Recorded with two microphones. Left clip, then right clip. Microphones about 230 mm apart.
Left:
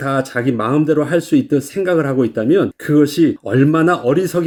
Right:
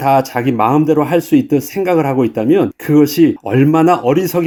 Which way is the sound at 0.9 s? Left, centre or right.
Right.